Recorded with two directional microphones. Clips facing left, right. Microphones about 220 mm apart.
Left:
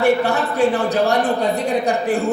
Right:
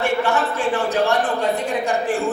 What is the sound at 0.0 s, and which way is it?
Speech, 35° left (ahead or behind).